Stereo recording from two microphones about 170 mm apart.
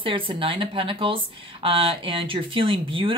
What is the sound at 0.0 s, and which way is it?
Speech, 30° right (ahead or behind).